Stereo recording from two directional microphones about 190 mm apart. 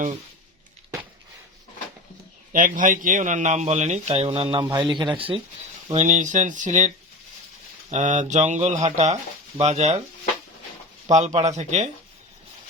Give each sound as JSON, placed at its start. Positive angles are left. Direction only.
{"t": 2.5, "sound": "speech", "side_deg": -45}
{"t": 5.9, "sound": "speech", "side_deg": -40}
{"t": 11.1, "sound": "speech", "side_deg": -35}